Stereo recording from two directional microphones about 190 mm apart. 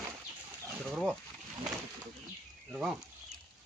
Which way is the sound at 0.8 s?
Centre (ahead or behind).